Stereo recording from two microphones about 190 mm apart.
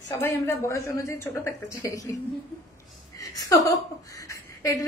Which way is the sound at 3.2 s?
20° left (ahead or behind).